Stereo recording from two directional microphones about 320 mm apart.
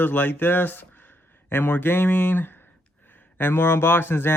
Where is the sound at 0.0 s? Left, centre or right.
Centre.